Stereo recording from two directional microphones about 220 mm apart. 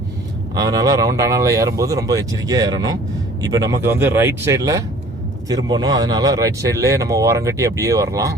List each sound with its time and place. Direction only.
0.5 s speech: 15° right (ahead or behind)